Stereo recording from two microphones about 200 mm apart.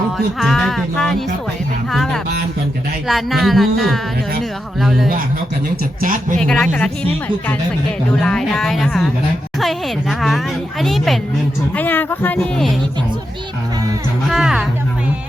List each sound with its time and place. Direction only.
0.3 s speech: centre (ahead or behind)
6.0 s speech: 40° right (ahead or behind)
6.4 s speech: 5° left (ahead or behind)
8.1 s speech: 5° left (ahead or behind)
14.3 s speech: centre (ahead or behind)